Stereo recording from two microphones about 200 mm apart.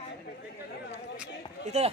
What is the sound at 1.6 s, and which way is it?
Speech, 35° right (ahead or behind).